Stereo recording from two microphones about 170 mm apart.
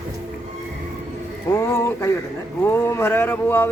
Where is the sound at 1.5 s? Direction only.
15° left (ahead or behind).